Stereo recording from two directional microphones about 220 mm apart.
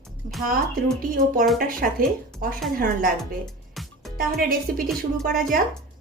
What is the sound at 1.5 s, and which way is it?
Speech, 40° right (ahead or behind).